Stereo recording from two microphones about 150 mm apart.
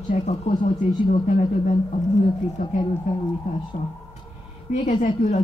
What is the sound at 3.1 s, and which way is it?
Speech, 60° left (ahead or behind).